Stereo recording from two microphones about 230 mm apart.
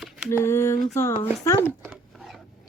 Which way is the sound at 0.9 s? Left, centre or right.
Centre.